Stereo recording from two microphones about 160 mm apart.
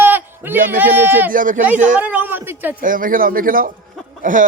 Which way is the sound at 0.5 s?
60° right (ahead or behind).